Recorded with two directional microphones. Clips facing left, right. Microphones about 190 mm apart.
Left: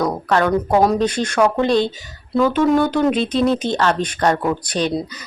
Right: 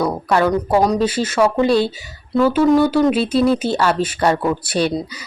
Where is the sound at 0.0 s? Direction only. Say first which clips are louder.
Right 1 dB; 5° right (ahead or behind).